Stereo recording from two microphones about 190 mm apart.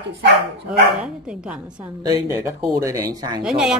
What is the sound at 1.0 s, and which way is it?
A woman's voice, 5° right (ahead or behind).